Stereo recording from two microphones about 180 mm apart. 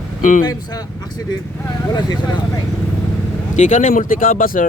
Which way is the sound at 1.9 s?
25° left (ahead or behind).